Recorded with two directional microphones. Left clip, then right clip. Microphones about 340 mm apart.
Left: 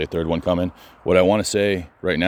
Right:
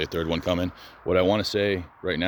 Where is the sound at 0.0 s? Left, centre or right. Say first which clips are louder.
Left 4 dB; left.